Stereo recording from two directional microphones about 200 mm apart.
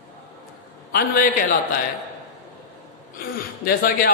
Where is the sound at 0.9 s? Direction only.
50° left (ahead or behind).